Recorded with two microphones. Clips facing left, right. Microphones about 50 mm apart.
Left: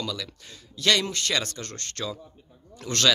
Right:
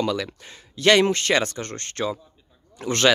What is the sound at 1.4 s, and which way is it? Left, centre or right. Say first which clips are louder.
Speech: right 5 dB; right.